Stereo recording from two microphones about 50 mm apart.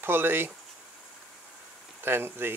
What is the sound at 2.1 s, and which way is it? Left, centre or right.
Speech, right.